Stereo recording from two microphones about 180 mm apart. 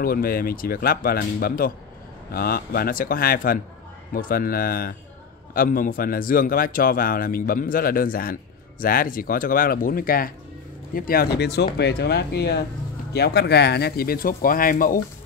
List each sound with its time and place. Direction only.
0.0 s a man's voice: 55° left (ahead or behind)